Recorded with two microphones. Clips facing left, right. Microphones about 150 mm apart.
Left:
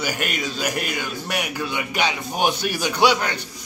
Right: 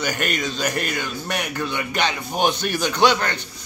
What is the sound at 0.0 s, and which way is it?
A man's voice, 5° left (ahead or behind).